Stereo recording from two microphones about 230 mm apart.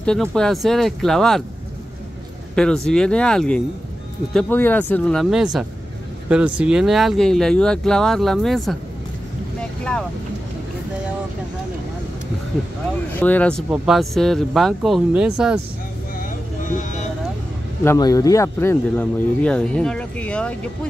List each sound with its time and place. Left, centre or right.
0.0 s speech: centre
2.5 s speech: centre
9.6 s boat: centre
13.2 s speech: centre
16.2 s vehicle: left
17.8 s speech: centre